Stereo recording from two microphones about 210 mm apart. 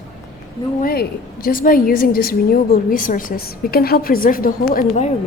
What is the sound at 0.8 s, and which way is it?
A woman's voice, 45° left (ahead or behind).